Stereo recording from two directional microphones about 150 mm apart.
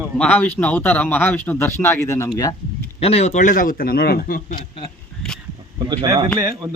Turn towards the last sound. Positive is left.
turn(degrees=-30)  # may be behind; listen again after turning